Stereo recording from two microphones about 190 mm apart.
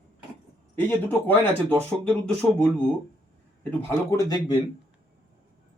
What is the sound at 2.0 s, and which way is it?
A man's voice, 5° left (ahead or behind).